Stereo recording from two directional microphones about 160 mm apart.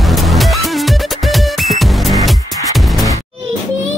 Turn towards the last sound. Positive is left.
turn(degrees=0)  # may be behind; listen again after turning